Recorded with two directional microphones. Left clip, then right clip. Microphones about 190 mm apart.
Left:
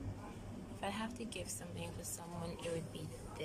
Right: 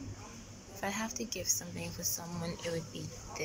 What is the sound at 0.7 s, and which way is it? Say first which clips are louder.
Speech: right 6 dB; centre (ahead or behind).